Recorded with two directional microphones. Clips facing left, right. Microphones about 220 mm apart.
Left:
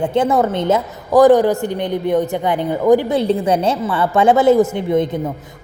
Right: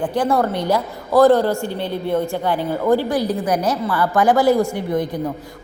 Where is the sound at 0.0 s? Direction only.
25° left (ahead or behind).